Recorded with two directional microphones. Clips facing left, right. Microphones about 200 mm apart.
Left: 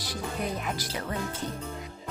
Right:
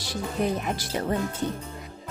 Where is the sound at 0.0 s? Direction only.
30° right (ahead or behind).